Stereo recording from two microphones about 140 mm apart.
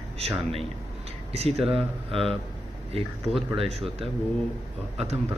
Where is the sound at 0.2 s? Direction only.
45° right (ahead or behind).